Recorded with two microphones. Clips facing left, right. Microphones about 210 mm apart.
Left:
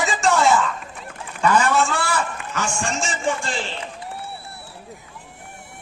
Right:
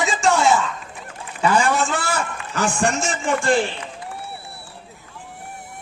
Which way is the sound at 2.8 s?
60° right (ahead or behind).